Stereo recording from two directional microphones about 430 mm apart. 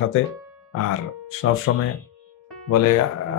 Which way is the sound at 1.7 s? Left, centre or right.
Left.